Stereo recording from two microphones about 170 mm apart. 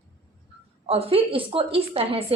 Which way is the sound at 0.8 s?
35° right (ahead or behind).